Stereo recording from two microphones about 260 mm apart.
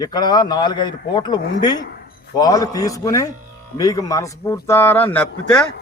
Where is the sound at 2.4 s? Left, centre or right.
Centre.